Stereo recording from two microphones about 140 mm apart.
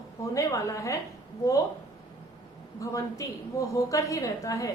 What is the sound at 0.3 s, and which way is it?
Speech, 20° left (ahead or behind).